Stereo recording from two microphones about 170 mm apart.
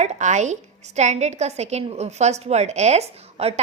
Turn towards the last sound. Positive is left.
turn(degrees=-40)  # may be behind; listen again after turning